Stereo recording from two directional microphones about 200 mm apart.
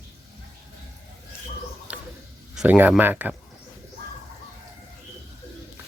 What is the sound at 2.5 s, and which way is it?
Speech, 5° right (ahead or behind).